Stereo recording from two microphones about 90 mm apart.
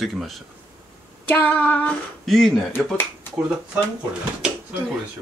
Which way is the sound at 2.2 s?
Centre (ahead or behind).